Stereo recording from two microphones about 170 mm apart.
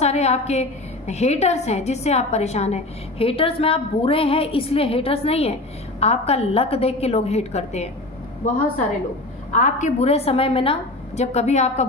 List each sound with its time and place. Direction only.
0.0 s a woman's voice: 40° left (ahead or behind)
9.5 s a woman's voice: 50° left (ahead or behind)